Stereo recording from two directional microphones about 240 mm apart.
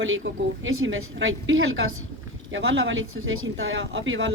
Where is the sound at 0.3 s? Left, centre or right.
Right.